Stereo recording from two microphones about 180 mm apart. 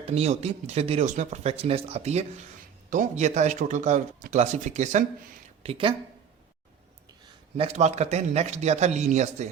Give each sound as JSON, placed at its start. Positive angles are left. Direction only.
{"t": 0.0, "sound": "speech", "side_deg": -35}
{"t": 5.6, "sound": "speech", "side_deg": -30}
{"t": 7.5, "sound": "speech", "side_deg": -35}